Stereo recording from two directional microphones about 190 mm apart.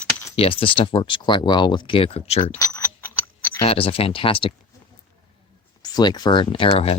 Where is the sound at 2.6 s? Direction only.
15° left (ahead or behind).